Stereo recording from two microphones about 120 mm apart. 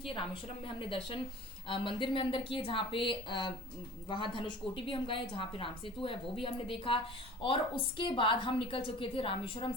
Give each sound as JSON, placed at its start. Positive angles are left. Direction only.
{"t": 0.0, "sound": "a woman's voice", "side_deg": 45}